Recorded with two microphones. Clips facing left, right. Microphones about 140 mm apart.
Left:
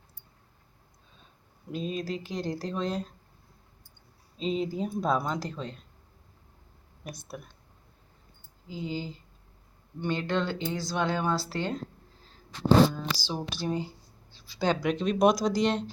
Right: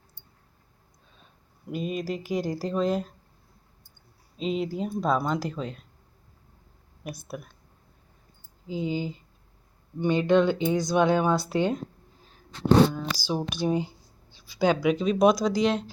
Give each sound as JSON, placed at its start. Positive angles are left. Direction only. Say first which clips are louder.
{"t": 1.7, "sound": "speech", "louder": "right 2 dB", "side_deg": -10}
{"t": 4.4, "sound": "speech", "louder": "right 1 dB", "side_deg": -5}
{"t": 7.0, "sound": "speech", "louder": "right 4 dB", "side_deg": -10}
{"t": 8.6, "sound": "speech", "louder": "right 6 dB", "side_deg": -20}
{"t": 13.1, "sound": "speech", "louder": "right 5 dB", "side_deg": -10}